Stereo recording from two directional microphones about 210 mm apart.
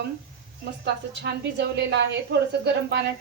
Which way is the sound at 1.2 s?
50° right (ahead or behind).